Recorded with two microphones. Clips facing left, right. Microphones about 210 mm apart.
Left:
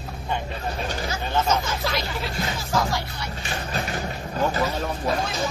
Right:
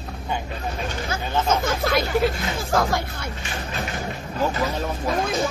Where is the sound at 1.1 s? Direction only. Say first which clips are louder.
Right 1 dB; 55° right (ahead or behind).